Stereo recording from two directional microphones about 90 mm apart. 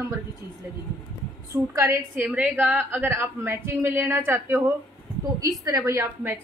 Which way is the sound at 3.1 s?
30° right (ahead or behind).